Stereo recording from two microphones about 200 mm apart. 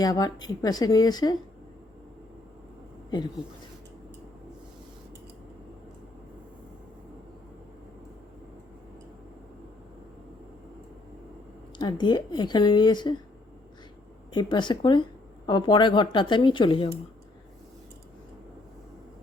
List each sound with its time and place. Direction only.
0.0 s speech: 20° left (ahead or behind)
11.8 s speech: 20° left (ahead or behind)
14.3 s speech: 20° left (ahead or behind)